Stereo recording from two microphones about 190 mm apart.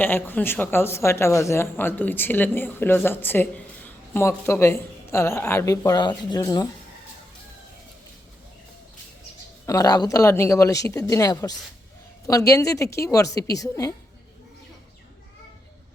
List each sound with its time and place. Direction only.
0.0 s speech: 10° left (ahead or behind)
9.6 s speech: 20° left (ahead or behind)